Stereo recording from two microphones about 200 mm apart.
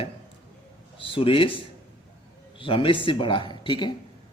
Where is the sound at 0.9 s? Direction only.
25° left (ahead or behind).